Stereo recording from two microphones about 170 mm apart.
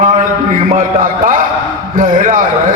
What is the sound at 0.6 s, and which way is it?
A man's voice, 50° right (ahead or behind).